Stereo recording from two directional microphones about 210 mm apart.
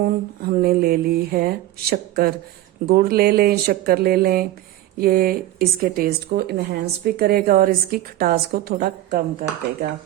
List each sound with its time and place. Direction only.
0.4 s a woman's voice: 45° right (ahead or behind)